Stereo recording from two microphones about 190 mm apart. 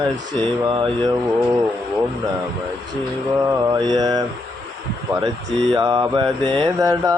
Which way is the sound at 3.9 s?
20° right (ahead or behind).